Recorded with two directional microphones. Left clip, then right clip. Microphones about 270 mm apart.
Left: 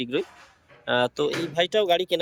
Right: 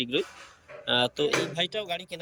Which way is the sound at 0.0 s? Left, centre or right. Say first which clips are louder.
Left 1 dB; centre.